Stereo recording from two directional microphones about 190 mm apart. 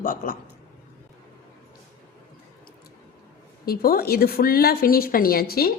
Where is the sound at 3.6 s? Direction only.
50° left (ahead or behind).